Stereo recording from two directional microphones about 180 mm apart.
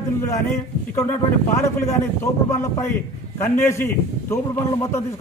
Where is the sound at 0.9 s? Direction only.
15° left (ahead or behind).